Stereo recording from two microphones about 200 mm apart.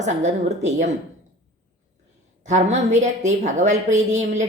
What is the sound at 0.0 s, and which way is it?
Speech, 35° right (ahead or behind).